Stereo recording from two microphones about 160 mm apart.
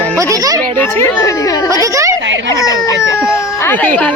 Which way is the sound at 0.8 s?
15° left (ahead or behind).